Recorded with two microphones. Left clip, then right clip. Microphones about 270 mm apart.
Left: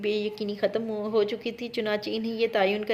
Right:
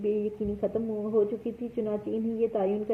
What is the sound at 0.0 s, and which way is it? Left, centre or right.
A woman's voice, left.